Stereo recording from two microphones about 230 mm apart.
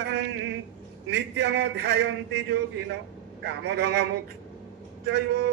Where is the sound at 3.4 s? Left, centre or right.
Right.